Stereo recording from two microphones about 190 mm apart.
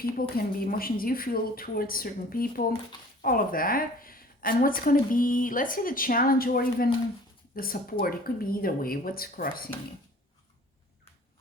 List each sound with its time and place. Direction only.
0.2 s a woman's voice: 50° left (ahead or behind)